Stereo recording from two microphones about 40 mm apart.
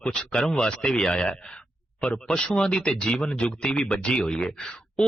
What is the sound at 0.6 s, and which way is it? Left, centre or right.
Speech, centre.